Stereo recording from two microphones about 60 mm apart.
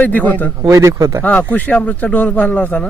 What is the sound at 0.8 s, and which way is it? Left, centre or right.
Speech, right.